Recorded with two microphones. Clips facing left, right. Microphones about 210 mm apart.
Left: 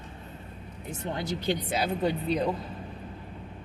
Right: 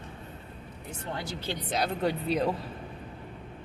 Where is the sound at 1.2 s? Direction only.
15° left (ahead or behind).